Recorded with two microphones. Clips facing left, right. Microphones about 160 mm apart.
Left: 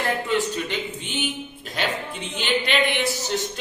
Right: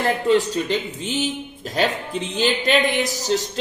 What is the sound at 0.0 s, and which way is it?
A man's voice, 35° right (ahead or behind).